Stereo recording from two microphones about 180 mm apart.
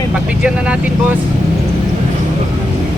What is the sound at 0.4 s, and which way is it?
Speech, 5° right (ahead or behind).